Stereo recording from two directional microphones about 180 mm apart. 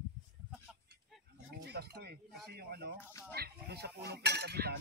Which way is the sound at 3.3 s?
60° right (ahead or behind).